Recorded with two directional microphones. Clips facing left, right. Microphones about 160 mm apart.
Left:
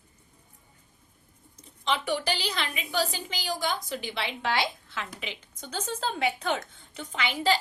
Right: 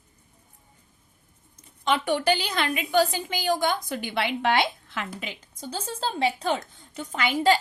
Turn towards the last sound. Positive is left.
turn(degrees=-45)  # may be behind; listen again after turning